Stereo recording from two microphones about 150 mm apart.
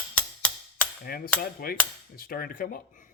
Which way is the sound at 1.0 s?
85° left.